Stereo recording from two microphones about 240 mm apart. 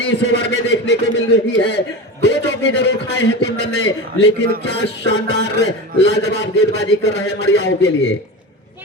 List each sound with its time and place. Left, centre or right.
0.0 s a man's voice: left